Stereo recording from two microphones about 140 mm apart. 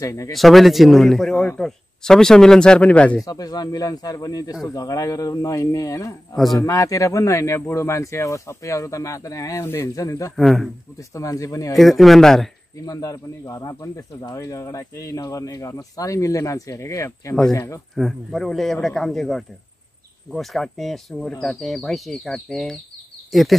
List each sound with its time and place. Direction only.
0.0 s speech: 20° left (ahead or behind)
0.3 s speech: centre (ahead or behind)
1.3 s speech: 15° left (ahead or behind)
1.6 s speech: 5° left (ahead or behind)
3.3 s speech: 25° left (ahead or behind)
6.3 s speech: centre (ahead or behind)
6.6 s speech: 25° left (ahead or behind)
10.3 s speech: centre (ahead or behind)
11.0 s speech: 25° left (ahead or behind)
11.7 s speech: centre (ahead or behind)
12.7 s speech: 25° left (ahead or behind)
17.9 s speech: centre (ahead or behind)